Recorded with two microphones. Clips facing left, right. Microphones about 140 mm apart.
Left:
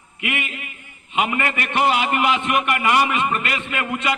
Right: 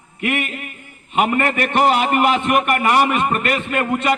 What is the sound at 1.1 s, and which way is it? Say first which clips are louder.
A man's voice: right 4 dB; 40° right (ahead or behind).